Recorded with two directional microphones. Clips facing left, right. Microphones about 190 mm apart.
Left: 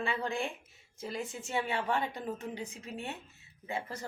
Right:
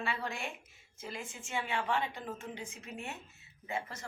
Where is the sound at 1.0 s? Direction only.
35° left (ahead or behind).